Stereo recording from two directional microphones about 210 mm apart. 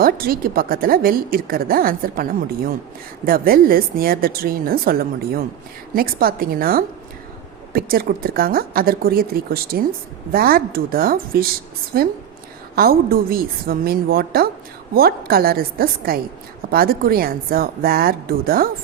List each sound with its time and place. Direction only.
0.0 s a woman's voice: 45° right (ahead or behind)